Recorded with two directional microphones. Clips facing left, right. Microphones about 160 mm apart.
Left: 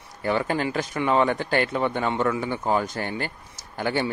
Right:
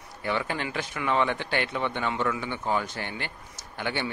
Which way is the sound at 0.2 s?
40° left (ahead or behind).